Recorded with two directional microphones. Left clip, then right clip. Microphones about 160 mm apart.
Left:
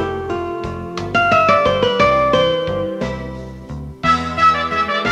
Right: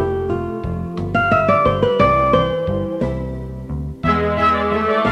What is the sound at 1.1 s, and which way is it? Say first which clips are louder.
Music: left 2 dB; 40° right (ahead or behind).